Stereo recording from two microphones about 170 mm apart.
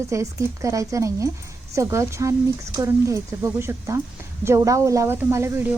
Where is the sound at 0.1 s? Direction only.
20° right (ahead or behind).